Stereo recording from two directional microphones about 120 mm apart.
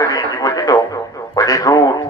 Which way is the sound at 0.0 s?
30° left (ahead or behind).